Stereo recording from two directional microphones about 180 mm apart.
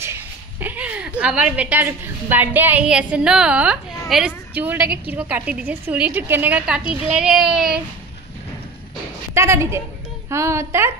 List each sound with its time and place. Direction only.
0.0 s a woman's voice: 15° right (ahead or behind)
9.3 s a woman's voice: 15° right (ahead or behind)